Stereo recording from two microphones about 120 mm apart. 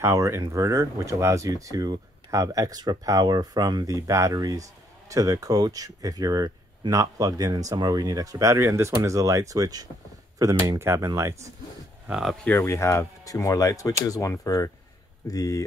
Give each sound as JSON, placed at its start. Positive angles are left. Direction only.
{"t": 0.0, "sound": "speech", "side_deg": -25}
{"t": 12.1, "sound": "cattle", "side_deg": -5}
{"t": 12.4, "sound": "speech", "side_deg": 20}